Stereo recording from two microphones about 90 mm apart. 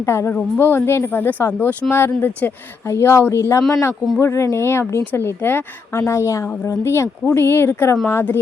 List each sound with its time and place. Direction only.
0.0 s a woman's voice: 30° left (ahead or behind)